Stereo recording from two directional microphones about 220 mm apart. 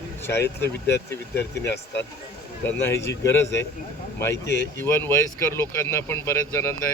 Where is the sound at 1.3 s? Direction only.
50° left (ahead or behind).